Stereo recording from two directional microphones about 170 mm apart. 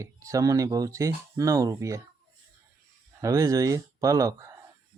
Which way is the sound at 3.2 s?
20° right (ahead or behind).